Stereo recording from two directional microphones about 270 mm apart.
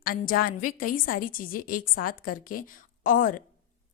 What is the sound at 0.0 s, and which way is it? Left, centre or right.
A woman's voice, left.